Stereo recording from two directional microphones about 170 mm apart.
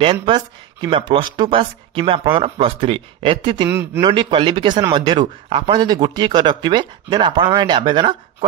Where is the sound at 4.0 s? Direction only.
30° right (ahead or behind).